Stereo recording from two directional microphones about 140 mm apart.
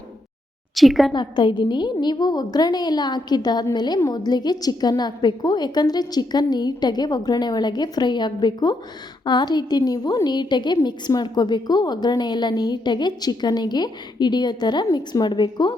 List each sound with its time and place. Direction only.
0.8 s a woman's voice: centre (ahead or behind)
1.1 s a woman's voice: 35° left (ahead or behind)